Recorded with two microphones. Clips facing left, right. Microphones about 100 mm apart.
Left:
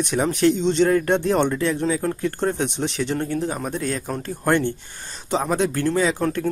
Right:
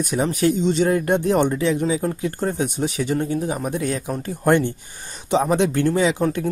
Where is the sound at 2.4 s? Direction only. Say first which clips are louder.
Even; 5° right (ahead or behind).